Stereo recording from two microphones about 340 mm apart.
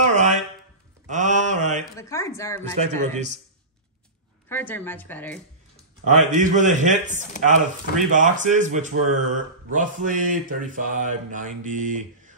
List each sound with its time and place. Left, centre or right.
0.0 s a sound: right
1.0 s mantra: right
2.0 s speech: centre
2.8 s speech: centre
4.5 s a woman's voice: centre
6.0 s speech: right